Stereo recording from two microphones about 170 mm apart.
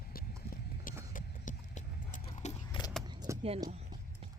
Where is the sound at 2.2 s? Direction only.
40° left (ahead or behind).